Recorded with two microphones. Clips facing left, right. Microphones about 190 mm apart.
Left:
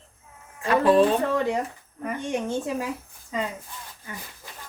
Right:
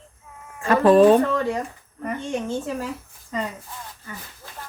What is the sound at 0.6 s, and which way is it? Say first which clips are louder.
Speech: right 4 dB; 45° right (ahead or behind).